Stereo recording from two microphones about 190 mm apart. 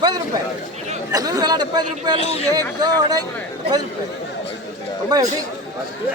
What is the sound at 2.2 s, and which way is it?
Speech, 30° left (ahead or behind).